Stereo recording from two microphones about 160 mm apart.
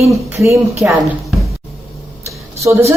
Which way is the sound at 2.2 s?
20° right (ahead or behind).